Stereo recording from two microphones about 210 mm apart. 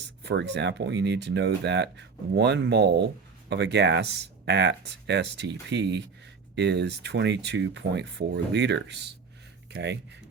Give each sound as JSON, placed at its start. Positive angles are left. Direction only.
{"t": 0.2, "sound": "speech", "side_deg": -55}